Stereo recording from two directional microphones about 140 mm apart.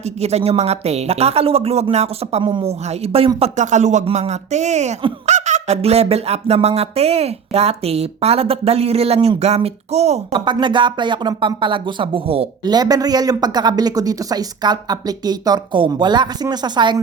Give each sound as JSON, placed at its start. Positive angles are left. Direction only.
{"t": 0.0, "sound": "fowl", "side_deg": -50}
{"t": 2.4, "sound": "fowl", "side_deg": -35}
{"t": 10.4, "sound": "speech", "side_deg": -35}
{"t": 12.6, "sound": "speech", "side_deg": -30}